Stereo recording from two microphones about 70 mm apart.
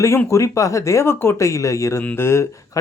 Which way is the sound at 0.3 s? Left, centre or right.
Left.